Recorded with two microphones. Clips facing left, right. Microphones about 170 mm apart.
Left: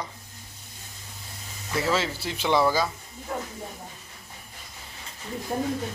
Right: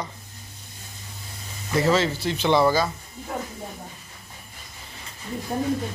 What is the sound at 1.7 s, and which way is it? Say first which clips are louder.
Speech: right 5 dB; 5° left (ahead or behind).